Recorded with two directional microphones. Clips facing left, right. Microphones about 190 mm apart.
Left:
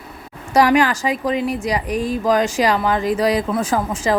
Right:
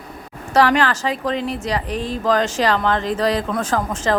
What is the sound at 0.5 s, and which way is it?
Speech, 10° left (ahead or behind).